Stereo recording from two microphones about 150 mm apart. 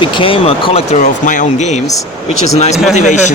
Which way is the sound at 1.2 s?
60° left (ahead or behind).